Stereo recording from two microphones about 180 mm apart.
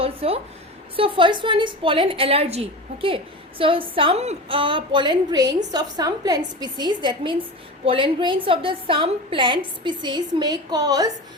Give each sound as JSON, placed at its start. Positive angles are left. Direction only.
{"t": 0.0, "sound": "a woman's voice", "side_deg": -30}